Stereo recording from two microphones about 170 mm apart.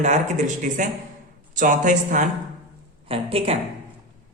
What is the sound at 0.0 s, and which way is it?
A woman's voice, 45° right (ahead or behind).